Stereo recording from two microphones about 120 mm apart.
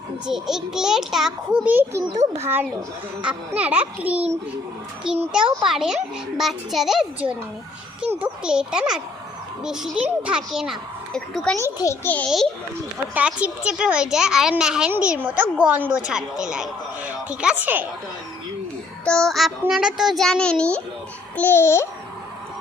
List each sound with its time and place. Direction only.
0.3 s a child's voice: 5° right (ahead or behind)
1.6 s a child's voice: 20° right (ahead or behind); by 11.5 s centre (ahead or behind)
12.1 s a child's voice: 15° left (ahead or behind)
13.1 s a child's voice: 10° right (ahead or behind)
19.0 s a child's voice: 5° left (ahead or behind)
21.3 s babbling: 15° left (ahead or behind)